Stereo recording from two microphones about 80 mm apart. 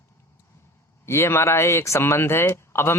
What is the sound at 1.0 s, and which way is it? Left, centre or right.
Speech, left.